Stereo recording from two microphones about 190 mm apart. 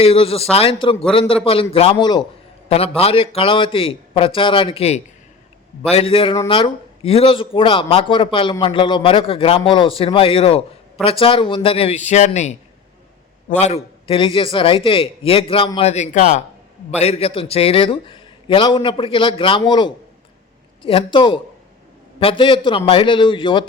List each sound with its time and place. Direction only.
0.0 s a man's voice: 30° left (ahead or behind)
13.6 s speech: 35° left (ahead or behind)